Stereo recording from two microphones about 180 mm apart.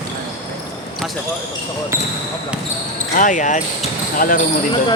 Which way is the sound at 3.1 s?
45° left (ahead or behind).